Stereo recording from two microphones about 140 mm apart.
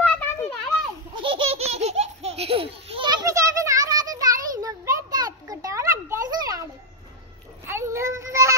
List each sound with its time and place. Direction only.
0.0 s a sound: 10° left (ahead or behind)
1.1 s laughter: 40° right (ahead or behind); by 6.6 s 25° right (ahead or behind)
7.6 s child singing: 20° right (ahead or behind)